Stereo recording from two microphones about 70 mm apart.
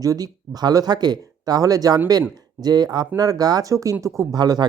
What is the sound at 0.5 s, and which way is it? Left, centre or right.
Speech, right.